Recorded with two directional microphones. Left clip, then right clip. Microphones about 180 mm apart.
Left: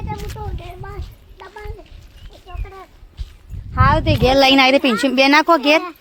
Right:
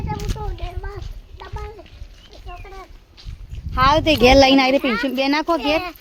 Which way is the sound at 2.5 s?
5° right (ahead or behind).